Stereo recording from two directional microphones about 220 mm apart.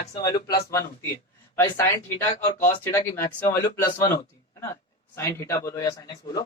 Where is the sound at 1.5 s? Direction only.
15° left (ahead or behind).